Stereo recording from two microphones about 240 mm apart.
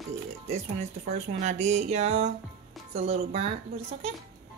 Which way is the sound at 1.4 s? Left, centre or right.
Right.